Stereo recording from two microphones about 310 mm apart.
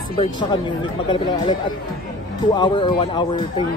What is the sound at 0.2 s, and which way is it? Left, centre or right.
Speech, centre.